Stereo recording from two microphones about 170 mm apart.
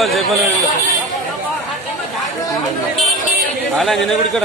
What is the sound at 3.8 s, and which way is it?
Speech, centre (ahead or behind).